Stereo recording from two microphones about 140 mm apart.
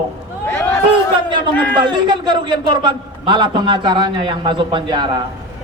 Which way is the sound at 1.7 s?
30° right (ahead or behind).